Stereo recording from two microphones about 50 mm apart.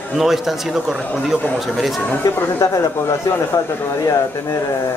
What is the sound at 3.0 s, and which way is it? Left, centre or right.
Speech, left.